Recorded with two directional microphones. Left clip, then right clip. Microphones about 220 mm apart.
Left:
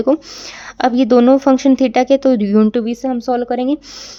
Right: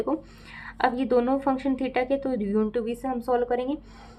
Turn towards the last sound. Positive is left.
turn(degrees=40)  # may be behind; listen again after turning